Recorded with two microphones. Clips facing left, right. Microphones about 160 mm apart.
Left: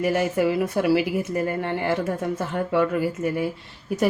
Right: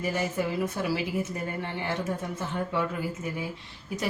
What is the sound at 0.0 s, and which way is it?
Speech, 75° left (ahead or behind).